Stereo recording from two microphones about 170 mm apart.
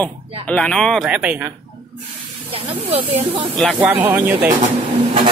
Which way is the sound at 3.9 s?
10° right (ahead or behind).